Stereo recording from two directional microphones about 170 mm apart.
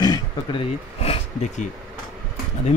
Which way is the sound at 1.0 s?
40° left (ahead or behind).